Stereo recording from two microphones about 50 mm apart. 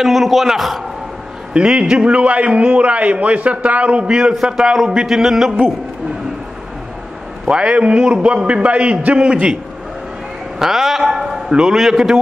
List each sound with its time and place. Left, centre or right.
0.0 s a man's voice: centre
1.5 s a man's voice: right
7.4 s a man's voice: right
10.6 s a man's voice: centre